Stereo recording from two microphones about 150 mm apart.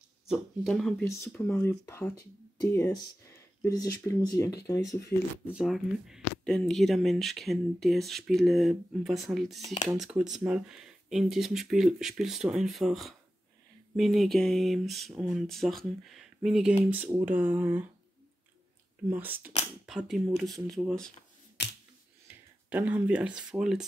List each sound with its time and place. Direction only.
0.3 s speech: centre (ahead or behind); by 5.0 s 20° left (ahead or behind)
5.5 s speech: 5° right (ahead or behind)
19.0 s speech: 10° right (ahead or behind)
22.3 s speech: 10° right (ahead or behind)